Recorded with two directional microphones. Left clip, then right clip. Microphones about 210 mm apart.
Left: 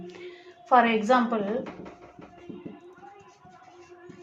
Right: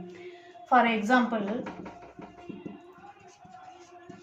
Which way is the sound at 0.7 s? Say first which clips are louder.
Left 2 dB; 45° left (ahead or behind).